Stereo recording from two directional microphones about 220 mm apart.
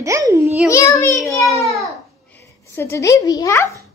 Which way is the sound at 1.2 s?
Centre (ahead or behind).